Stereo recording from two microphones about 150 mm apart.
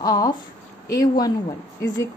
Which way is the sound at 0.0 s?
25° left (ahead or behind).